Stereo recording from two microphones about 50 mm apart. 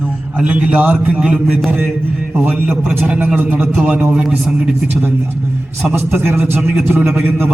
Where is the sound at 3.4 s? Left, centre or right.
Right.